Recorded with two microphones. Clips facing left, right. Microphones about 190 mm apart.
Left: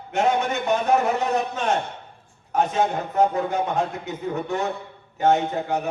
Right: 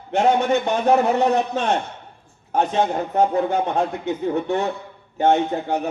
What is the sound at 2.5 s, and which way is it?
A man's voice, 30° right (ahead or behind).